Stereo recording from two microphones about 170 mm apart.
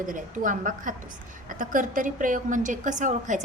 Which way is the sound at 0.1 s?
50° right (ahead or behind).